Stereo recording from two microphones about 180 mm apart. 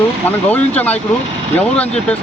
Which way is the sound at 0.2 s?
10° left (ahead or behind).